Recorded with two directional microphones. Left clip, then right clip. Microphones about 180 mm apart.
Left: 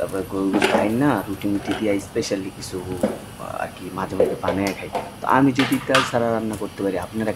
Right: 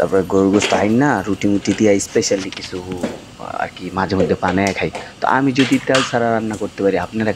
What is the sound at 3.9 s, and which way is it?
Speech, 30° right (ahead or behind).